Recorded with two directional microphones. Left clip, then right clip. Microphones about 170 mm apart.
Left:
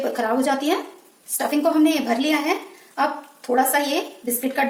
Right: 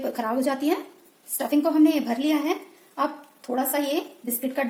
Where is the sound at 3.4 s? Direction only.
35° right (ahead or behind).